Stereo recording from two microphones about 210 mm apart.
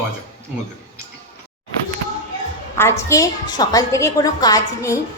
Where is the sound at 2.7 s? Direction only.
15° left (ahead or behind).